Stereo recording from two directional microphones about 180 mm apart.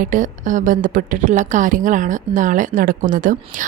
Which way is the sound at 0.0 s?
45° right (ahead or behind).